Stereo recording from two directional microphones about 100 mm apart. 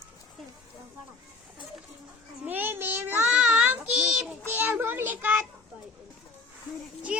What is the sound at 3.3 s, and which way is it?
Child singing, 5° right (ahead or behind).